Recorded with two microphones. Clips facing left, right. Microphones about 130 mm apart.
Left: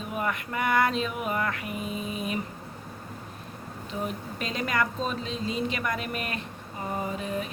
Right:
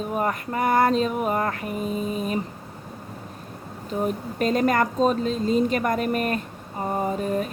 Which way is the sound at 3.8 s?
45° right (ahead or behind).